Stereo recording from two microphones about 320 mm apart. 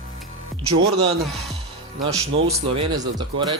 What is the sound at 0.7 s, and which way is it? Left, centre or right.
Speech, centre.